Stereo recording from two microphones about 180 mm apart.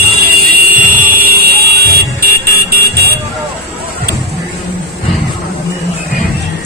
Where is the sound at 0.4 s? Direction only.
50° right (ahead or behind).